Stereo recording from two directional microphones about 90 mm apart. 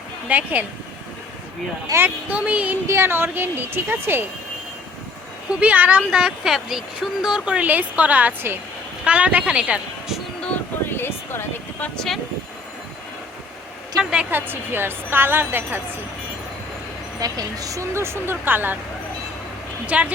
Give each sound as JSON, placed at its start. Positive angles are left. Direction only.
{"t": 0.3, "sound": "speech", "side_deg": -15}
{"t": 1.9, "sound": "speech", "side_deg": -25}
{"t": 2.8, "sound": "speech", "side_deg": -30}
{"t": 5.5, "sound": "speech", "side_deg": -15}
{"t": 10.8, "sound": "a sound", "side_deg": 25}
{"t": 11.9, "sound": "speech", "side_deg": 5}
{"t": 14.0, "sound": "speech", "side_deg": -10}
{"t": 14.3, "sound": "speech", "side_deg": -25}
{"t": 17.2, "sound": "speech", "side_deg": -40}
{"t": 19.9, "sound": "speech", "side_deg": -15}